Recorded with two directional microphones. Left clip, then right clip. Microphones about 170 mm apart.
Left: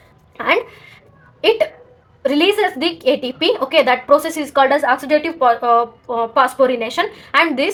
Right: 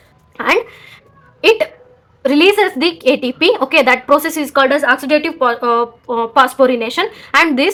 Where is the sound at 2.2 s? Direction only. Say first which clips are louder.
Right 4 dB; 40° right (ahead or behind).